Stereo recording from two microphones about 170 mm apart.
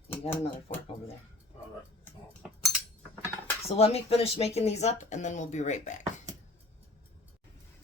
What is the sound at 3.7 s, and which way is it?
Speech, 35° left (ahead or behind).